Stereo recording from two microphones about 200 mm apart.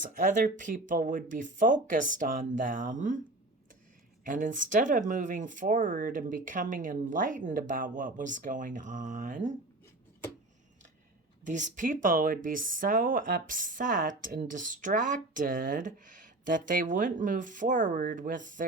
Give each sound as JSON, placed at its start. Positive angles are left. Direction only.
{"t": 0.0, "sound": "speech", "side_deg": -40}
{"t": 4.2, "sound": "speech", "side_deg": -40}
{"t": 11.4, "sound": "speech", "side_deg": -40}